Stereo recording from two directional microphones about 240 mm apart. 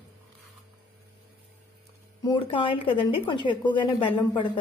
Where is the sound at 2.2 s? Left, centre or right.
Left.